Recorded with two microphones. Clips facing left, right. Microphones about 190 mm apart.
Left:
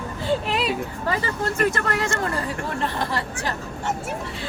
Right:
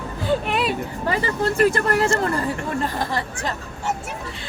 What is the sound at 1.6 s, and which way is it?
Speech, 35° right (ahead or behind).